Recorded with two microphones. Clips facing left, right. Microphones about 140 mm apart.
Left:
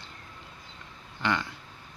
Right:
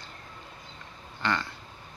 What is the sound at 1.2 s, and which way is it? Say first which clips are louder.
Speech: left 1 dB; 15° left (ahead or behind).